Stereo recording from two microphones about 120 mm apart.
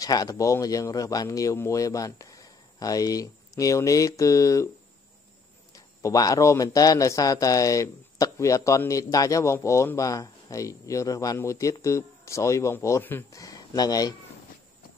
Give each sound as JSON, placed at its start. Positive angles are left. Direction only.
{"t": 0.0, "sound": "a man's voice", "side_deg": 30}
{"t": 6.0, "sound": "a man's voice", "side_deg": 30}